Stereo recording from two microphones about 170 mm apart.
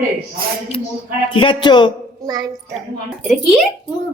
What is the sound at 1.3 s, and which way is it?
Speech, 30° left (ahead or behind).